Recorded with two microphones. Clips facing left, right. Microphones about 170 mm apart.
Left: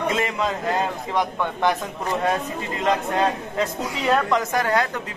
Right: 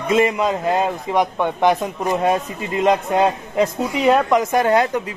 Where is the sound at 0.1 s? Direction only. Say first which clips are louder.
Right 7 dB; 20° right (ahead or behind).